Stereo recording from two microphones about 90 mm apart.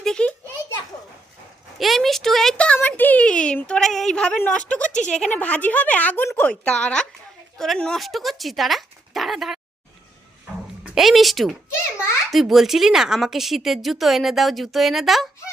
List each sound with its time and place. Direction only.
0.0 s a sound: 10° left (ahead or behind)
1.8 s a child's voice: centre (ahead or behind)
2.7 s a sound: 20° left (ahead or behind)
4.4 s a woman's voice: 15° left (ahead or behind)
6.5 s speech: 10° left (ahead or behind)
10.8 s a woman's voice: 5° right (ahead or behind)